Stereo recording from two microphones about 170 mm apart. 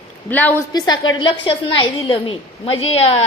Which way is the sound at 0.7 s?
25° left (ahead or behind).